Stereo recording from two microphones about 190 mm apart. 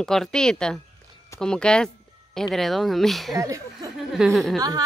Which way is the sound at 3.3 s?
15° right (ahead or behind).